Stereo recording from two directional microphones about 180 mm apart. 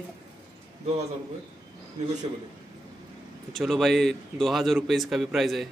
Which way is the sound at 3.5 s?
Centre (ahead or behind).